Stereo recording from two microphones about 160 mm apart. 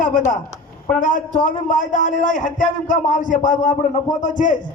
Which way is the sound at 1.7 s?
50° left (ahead or behind).